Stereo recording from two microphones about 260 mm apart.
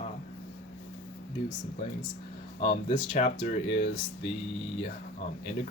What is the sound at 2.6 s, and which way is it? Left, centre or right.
Speech, left.